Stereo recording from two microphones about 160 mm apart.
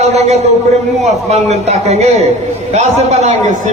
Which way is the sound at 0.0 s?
45° right (ahead or behind).